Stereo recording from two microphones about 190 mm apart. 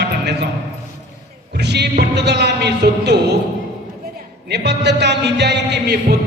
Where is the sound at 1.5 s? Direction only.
60° right (ahead or behind).